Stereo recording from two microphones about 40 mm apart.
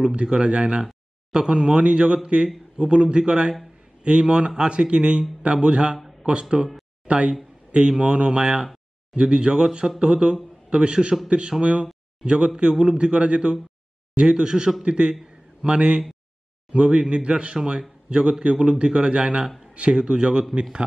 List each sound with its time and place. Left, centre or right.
0.0 s a man's voice: right